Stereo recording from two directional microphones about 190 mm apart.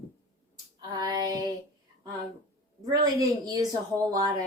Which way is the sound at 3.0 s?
20° right (ahead or behind).